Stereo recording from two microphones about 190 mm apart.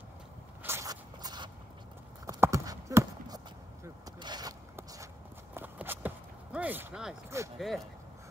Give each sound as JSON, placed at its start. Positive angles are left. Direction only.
{"t": 0.7, "sound": "walk", "side_deg": -15}
{"t": 2.2, "sound": "clip-clop", "side_deg": -15}
{"t": 3.8, "sound": "vehicle", "side_deg": -20}
{"t": 7.5, "sound": "speech", "side_deg": 0}